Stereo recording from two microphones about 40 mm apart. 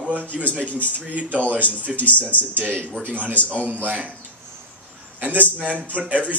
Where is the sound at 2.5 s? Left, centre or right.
Right.